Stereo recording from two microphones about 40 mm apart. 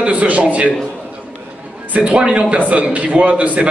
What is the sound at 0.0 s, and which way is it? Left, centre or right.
Speech, right.